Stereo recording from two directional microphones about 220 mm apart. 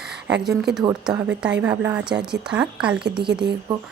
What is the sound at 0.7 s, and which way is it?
Speech, 50° right (ahead or behind).